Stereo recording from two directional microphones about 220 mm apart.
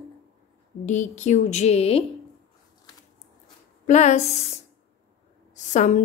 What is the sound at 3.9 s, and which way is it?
Speech, 30° left (ahead or behind).